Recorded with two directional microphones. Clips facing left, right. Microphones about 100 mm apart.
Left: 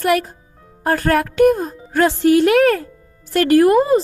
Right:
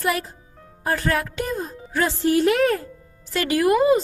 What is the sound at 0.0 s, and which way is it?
Speech, 60° left (ahead or behind).